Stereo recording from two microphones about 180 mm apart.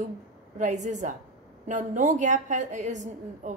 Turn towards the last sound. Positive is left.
turn(degrees=-45)  # may be behind; listen again after turning